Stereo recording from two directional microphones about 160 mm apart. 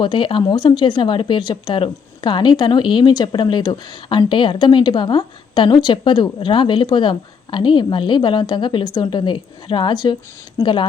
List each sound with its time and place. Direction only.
0.0 s speech: 30° left (ahead or behind)